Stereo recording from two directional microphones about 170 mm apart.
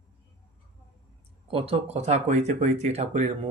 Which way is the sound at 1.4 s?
35° right (ahead or behind).